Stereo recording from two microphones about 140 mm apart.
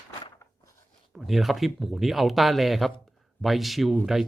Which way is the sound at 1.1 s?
Centre (ahead or behind).